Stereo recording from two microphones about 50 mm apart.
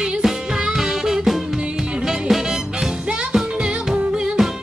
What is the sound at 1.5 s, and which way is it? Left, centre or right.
Music, centre.